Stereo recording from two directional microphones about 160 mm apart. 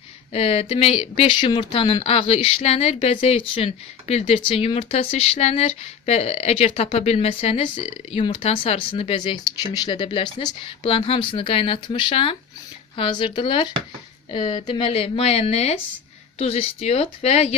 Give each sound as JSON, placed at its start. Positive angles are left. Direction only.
{"t": 0.3, "sound": "speech", "side_deg": 40}